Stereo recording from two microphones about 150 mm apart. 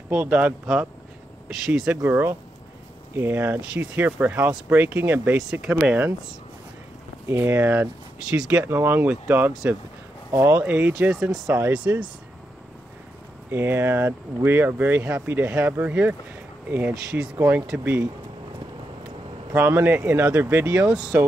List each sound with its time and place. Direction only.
0.1 s speech: 10° right (ahead or behind)
2.0 s speech: 15° right (ahead or behind)
7.2 s speech: 15° right (ahead or behind)
10.3 s speech: 15° right (ahead or behind)
13.5 s speech: 15° right (ahead or behind)
19.5 s speech: 15° right (ahead or behind)